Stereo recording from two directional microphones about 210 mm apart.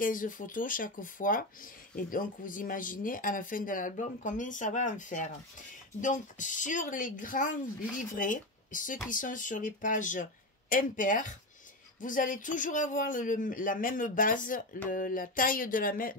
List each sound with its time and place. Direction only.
0.0 s speech: 40° left (ahead or behind)